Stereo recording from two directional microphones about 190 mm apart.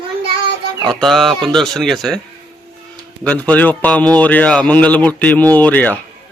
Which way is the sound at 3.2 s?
5° left (ahead or behind).